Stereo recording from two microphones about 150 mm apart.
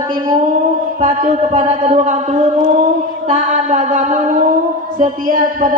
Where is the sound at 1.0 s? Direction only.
50° right (ahead or behind).